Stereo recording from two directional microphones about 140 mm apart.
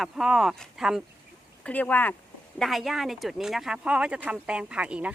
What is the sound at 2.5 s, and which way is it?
A woman's voice, centre (ahead or behind).